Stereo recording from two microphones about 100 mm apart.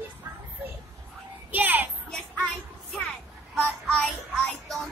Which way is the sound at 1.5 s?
20° right (ahead or behind).